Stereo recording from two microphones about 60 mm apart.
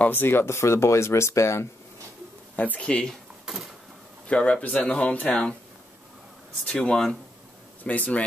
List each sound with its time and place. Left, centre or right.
0.0 s speech: left
2.5 s speech: left
4.3 s speech: left
6.6 s speech: centre
7.8 s speech: left